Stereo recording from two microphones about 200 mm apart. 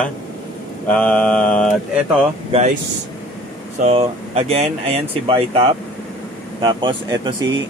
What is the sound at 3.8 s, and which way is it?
Speech, 30° right (ahead or behind).